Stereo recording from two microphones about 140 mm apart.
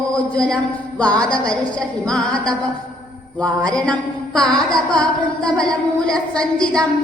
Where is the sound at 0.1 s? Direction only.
5° left (ahead or behind).